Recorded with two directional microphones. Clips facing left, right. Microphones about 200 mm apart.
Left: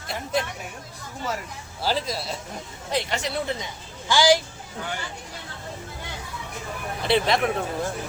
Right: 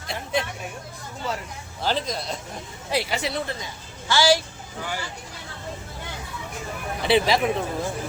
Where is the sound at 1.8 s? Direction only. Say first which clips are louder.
Even; 5° left (ahead or behind).